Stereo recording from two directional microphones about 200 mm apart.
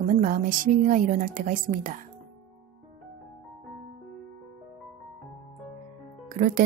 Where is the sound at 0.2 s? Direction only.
40° right (ahead or behind).